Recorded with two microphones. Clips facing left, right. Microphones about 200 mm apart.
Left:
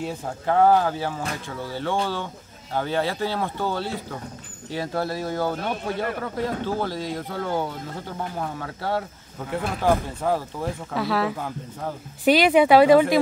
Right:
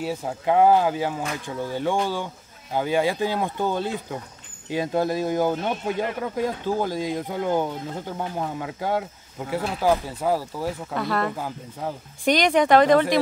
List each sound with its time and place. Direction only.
0.0 s speech: 5° right (ahead or behind)